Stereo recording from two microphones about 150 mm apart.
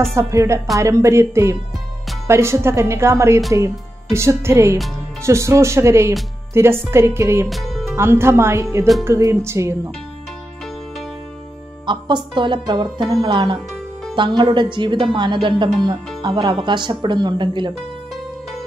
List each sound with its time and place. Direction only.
0.1 s speech: 20° right (ahead or behind)
7.4 s music: centre (ahead or behind)
7.9 s speech: 15° right (ahead or behind)
11.8 s speech: 30° right (ahead or behind)